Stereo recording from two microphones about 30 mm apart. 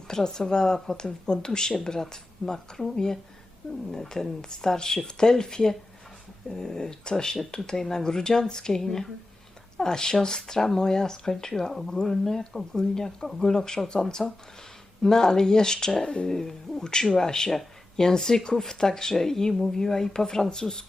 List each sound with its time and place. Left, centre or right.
0.1 s speech: left